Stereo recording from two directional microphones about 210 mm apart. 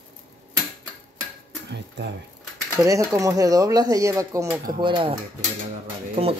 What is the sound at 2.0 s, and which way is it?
Speech, 55° right (ahead or behind).